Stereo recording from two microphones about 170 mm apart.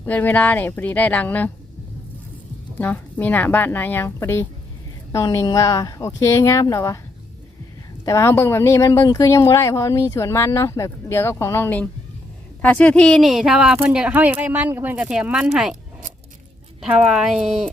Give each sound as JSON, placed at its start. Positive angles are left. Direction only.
{"t": 0.0, "sound": "speech", "side_deg": 10}
{"t": 2.7, "sound": "speech", "side_deg": 10}
{"t": 8.0, "sound": "speech", "side_deg": 15}
{"t": 16.8, "sound": "speech", "side_deg": -5}